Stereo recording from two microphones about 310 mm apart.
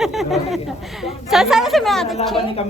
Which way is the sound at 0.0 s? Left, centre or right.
Centre.